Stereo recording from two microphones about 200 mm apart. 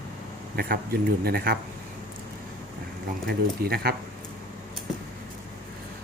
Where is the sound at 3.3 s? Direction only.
50° right (ahead or behind).